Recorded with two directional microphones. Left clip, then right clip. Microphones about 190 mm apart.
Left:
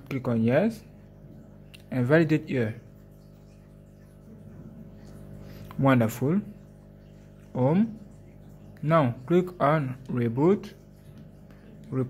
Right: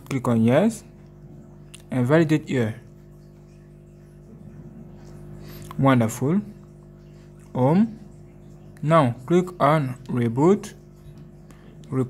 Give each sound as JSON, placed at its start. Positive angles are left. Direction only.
{"t": 0.1, "sound": "speech", "side_deg": -15}
{"t": 1.9, "sound": "speech", "side_deg": -5}
{"t": 5.7, "sound": "speech", "side_deg": -5}
{"t": 7.5, "sound": "speech", "side_deg": -10}
{"t": 11.9, "sound": "speech", "side_deg": -5}